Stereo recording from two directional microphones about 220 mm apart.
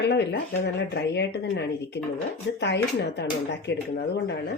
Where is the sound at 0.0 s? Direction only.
50° left (ahead or behind).